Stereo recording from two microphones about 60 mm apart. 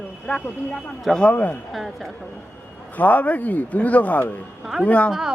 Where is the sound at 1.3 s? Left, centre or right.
Left.